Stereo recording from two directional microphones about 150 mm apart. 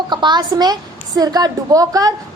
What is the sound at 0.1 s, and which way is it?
A woman's voice, 30° right (ahead or behind).